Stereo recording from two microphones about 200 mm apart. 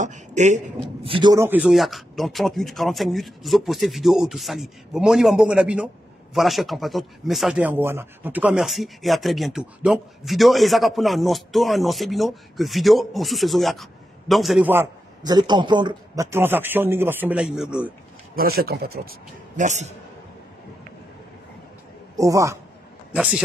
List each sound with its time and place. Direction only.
0.0 s a sound: 35° right (ahead or behind)
1.0 s speech: 25° right (ahead or behind); by 14.7 s centre (ahead or behind)
14.7 s a man's voice: 15° right (ahead or behind)
18.3 s speech: 50° right (ahead or behind)
19.0 s speech: 40° right (ahead or behind)
22.1 s a man's voice: 15° right (ahead or behind)